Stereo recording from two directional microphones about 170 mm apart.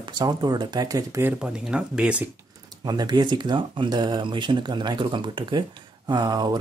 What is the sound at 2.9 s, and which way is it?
Speech, 25° right (ahead or behind).